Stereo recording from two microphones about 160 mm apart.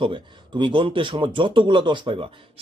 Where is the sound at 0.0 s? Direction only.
30° right (ahead or behind).